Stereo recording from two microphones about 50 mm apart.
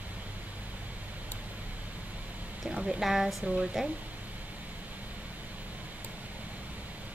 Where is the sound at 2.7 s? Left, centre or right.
Right.